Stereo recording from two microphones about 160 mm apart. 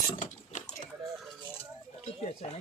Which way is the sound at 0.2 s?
50° left (ahead or behind).